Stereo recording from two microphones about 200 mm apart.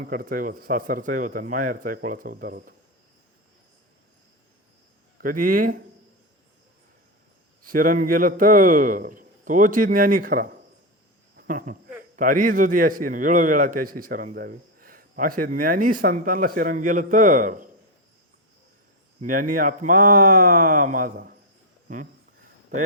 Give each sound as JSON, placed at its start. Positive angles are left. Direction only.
{"t": 0.0, "sound": "speech", "side_deg": -45}
{"t": 5.2, "sound": "speech", "side_deg": -45}
{"t": 7.6, "sound": "speech", "side_deg": -45}
{"t": 19.2, "sound": "speech", "side_deg": -45}